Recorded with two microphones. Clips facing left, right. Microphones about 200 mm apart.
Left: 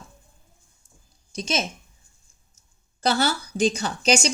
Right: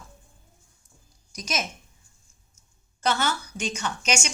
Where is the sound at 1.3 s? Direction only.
30° left (ahead or behind).